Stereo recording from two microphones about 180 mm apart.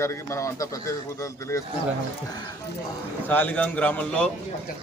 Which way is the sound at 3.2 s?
10° left (ahead or behind).